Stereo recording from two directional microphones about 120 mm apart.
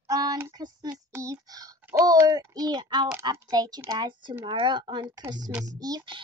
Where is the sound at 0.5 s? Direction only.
35° right (ahead or behind).